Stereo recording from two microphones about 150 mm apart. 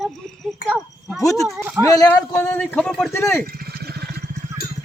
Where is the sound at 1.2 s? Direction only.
20° left (ahead or behind).